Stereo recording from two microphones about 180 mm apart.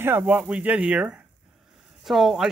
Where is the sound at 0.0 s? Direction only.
10° right (ahead or behind).